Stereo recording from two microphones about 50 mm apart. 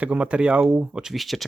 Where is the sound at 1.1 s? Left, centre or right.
Centre.